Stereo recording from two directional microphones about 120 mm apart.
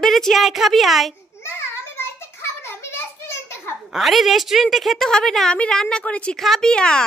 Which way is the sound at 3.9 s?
Centre (ahead or behind).